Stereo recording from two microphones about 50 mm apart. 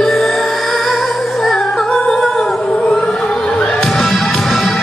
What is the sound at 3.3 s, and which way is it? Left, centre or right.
Music, centre.